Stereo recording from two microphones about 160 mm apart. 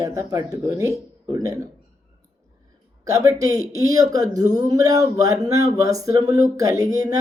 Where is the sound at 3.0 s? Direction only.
20° right (ahead or behind).